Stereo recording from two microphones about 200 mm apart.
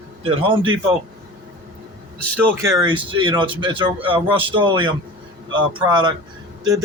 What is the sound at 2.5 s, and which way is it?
Speech, 15° right (ahead or behind).